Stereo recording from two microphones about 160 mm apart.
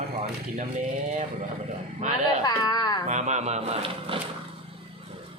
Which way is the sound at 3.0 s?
45° right (ahead or behind).